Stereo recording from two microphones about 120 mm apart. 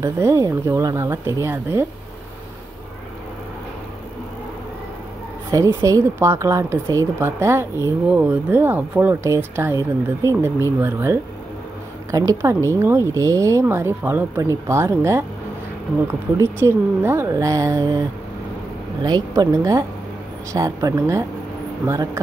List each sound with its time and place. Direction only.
0.0 s speech: 25° right (ahead or behind)
5.5 s speech: 25° right (ahead or behind)
19.0 s speech: 35° right (ahead or behind)